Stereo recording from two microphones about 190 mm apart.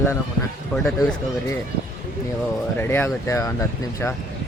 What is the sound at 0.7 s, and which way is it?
Speech, 5° left (ahead or behind).